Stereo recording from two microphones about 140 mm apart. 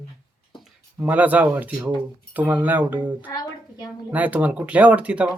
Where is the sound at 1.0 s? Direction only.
10° right (ahead or behind).